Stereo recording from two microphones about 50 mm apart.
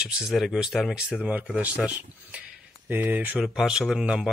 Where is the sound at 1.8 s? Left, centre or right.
Right.